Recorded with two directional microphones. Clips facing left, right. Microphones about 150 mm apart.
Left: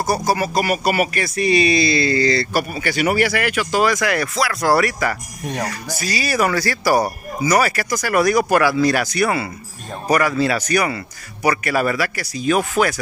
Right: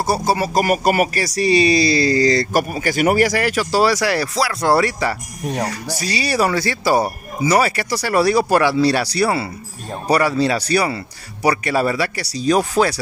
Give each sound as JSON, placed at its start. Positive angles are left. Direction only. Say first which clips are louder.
{"t": 0.0, "sound": "speech", "louder": "right 1 dB", "side_deg": -30}
{"t": 0.6, "sound": "speech", "louder": "right 5 dB", "side_deg": -45}